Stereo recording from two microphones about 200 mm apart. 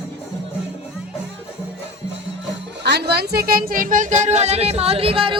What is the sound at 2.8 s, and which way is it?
Speech, 55° right (ahead or behind).